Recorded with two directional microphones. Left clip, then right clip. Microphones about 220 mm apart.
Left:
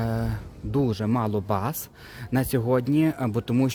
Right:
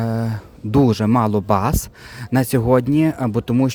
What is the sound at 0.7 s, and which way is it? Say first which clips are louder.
Speech: right 9 dB; 40° right (ahead or behind).